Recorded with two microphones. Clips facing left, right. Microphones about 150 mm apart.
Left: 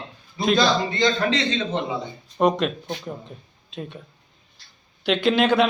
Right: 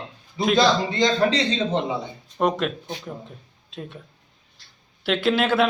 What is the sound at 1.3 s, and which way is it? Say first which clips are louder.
Speech: right 1 dB; 35° right (ahead or behind).